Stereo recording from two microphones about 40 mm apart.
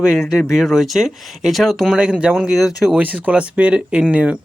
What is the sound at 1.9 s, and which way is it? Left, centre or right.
Speech, right.